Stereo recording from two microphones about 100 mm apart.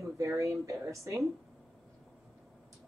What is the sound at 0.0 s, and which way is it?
A woman's voice, 30° right (ahead or behind).